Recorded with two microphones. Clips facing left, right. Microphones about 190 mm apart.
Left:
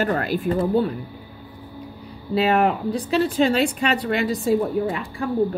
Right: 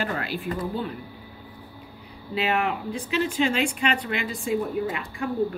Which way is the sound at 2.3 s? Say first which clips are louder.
Left 7 dB; 40° left (ahead or behind).